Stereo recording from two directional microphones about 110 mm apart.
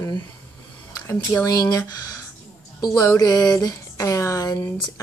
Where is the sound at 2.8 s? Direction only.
40° left (ahead or behind).